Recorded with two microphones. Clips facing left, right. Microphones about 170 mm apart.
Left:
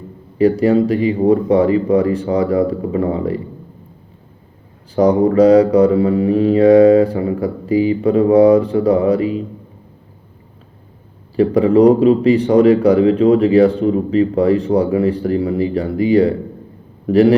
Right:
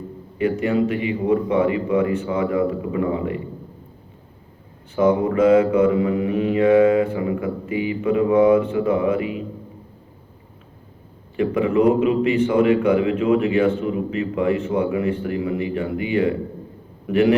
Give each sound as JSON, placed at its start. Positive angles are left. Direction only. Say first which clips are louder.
{"t": 0.3, "sound": "a man's voice", "louder": "left 7 dB", "side_deg": 35}
{"t": 4.9, "sound": "a man's voice", "louder": "left 6 dB", "side_deg": 35}
{"t": 11.3, "sound": "a man's voice", "louder": "left 7 dB", "side_deg": 35}